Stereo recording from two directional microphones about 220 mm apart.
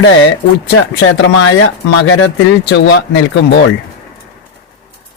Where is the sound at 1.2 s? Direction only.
70° left (ahead or behind); by 3.0 s 55° left (ahead or behind).